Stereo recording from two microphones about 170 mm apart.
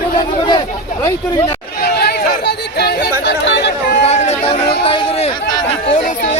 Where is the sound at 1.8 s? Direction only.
70° left (ahead or behind); by 3.7 s 85° left.